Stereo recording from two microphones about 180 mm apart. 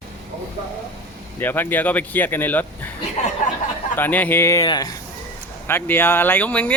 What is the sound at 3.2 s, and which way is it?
Speech, 40° left (ahead or behind).